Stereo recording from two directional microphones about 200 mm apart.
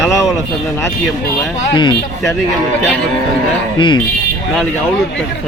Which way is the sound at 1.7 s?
20° left (ahead or behind).